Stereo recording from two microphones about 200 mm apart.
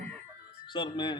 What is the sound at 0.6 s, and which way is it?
Speech, 25° left (ahead or behind).